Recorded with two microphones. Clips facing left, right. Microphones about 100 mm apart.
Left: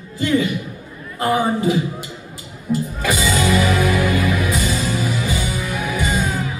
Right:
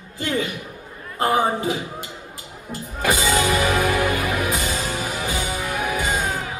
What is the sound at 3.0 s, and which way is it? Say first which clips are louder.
Music: even; 50° right (ahead or behind).